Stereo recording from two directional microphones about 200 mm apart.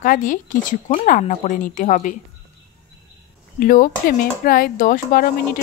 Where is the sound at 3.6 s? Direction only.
45° left (ahead or behind).